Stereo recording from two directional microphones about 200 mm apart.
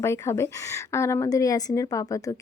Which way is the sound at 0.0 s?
15° left (ahead or behind).